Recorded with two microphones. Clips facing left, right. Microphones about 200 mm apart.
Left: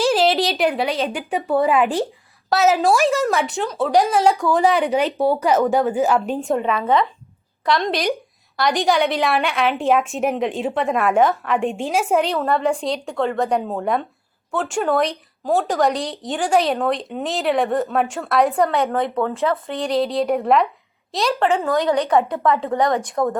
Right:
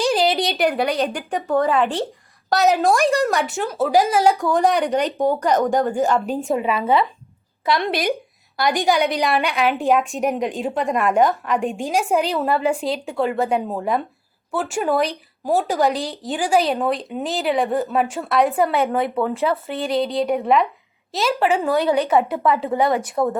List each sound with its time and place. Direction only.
0.0 s a woman's voice: centre (ahead or behind)